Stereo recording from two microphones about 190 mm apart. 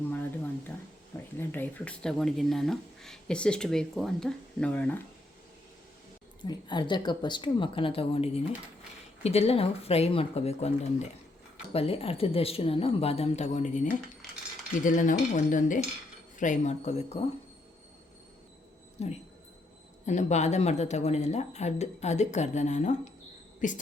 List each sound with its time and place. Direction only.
1.4 s speech: 10° left (ahead or behind)
6.4 s a woman's voice: 25° left (ahead or behind)
14.8 s cutlery: 45° left (ahead or behind)
16.4 s speech: 40° left (ahead or behind)
19.0 s speech: 35° left (ahead or behind)